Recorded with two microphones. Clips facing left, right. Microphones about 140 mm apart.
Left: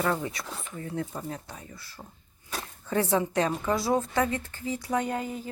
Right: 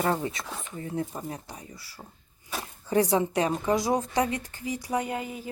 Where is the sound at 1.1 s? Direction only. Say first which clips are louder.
Even; 15° right (ahead or behind).